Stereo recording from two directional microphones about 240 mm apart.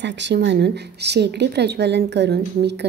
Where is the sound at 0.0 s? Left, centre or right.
Right.